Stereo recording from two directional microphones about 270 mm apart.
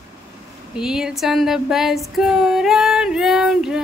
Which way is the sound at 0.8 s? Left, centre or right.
Centre.